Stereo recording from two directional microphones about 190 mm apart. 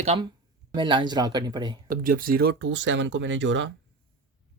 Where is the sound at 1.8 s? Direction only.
50° right (ahead or behind).